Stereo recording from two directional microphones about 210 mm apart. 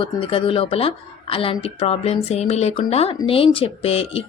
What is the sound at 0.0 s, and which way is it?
Speech, 25° left (ahead or behind).